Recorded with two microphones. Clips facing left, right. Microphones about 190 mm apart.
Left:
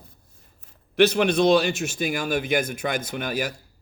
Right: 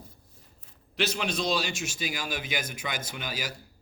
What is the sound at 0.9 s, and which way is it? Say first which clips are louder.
A man's voice: left 11 dB; 60° left (ahead or behind).